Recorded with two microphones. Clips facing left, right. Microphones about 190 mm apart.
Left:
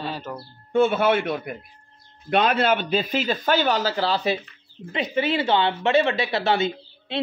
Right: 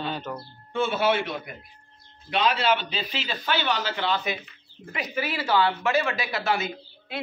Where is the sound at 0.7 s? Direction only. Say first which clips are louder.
Left 5 dB; 55° left (ahead or behind).